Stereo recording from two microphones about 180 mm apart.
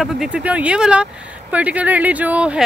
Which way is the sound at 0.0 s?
Centre (ahead or behind).